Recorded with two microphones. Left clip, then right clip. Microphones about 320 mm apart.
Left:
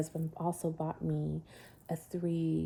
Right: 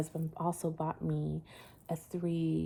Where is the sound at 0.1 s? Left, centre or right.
Right.